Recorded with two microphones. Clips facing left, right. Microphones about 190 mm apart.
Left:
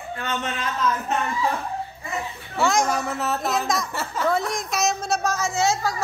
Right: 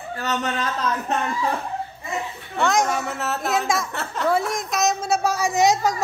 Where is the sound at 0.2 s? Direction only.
40° right (ahead or behind).